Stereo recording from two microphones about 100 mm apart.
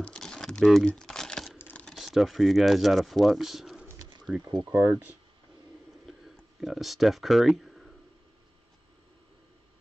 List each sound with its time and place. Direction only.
0.0 s crumpling: 10° left (ahead or behind)
1.6 s typing: 15° left (ahead or behind)
1.9 s speech: centre (ahead or behind)
4.6 s speech: 25° right (ahead or behind)
6.0 s a sound: centre (ahead or behind)